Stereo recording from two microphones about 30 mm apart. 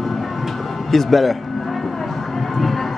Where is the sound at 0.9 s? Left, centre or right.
Centre.